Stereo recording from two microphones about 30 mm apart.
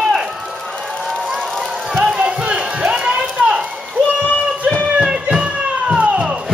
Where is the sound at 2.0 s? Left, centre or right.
Right.